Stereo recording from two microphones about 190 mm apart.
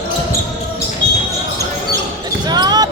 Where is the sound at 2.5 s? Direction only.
20° right (ahead or behind).